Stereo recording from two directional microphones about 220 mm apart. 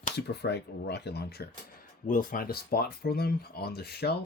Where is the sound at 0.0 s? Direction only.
50° left (ahead or behind).